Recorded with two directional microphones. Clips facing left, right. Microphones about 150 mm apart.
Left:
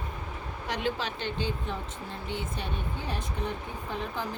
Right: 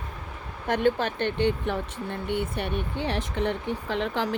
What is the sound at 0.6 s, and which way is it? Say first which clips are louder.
Speech: right 8 dB; 55° right (ahead or behind).